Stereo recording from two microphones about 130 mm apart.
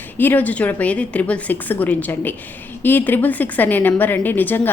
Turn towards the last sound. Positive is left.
turn(degrees=15)  # may be behind; listen again after turning